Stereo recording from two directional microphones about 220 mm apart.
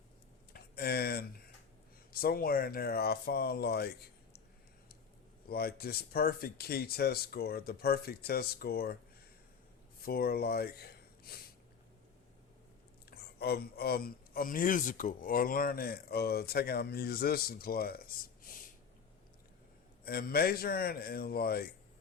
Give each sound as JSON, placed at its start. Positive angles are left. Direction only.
{"t": 0.5, "sound": "a sound", "side_deg": 45}
{"t": 2.1, "sound": "speech", "side_deg": 45}
{"t": 5.5, "sound": "speech", "side_deg": 45}
{"t": 10.0, "sound": "speech", "side_deg": 45}
{"t": 13.1, "sound": "speech", "side_deg": 45}
{"t": 20.1, "sound": "speech", "side_deg": 45}